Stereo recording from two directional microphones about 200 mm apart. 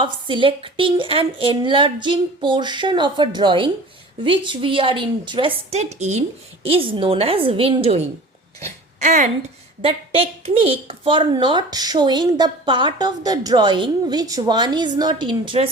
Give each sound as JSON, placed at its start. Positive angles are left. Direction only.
{"t": 0.0, "sound": "a woman's voice", "side_deg": -25}